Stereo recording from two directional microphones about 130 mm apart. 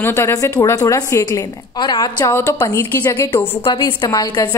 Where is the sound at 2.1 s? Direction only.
20° left (ahead or behind).